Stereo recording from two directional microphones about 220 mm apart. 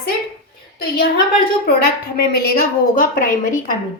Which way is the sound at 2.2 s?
45° left (ahead or behind).